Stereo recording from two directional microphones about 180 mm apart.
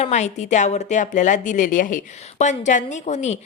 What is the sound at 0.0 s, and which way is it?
A woman's voice, 40° left (ahead or behind).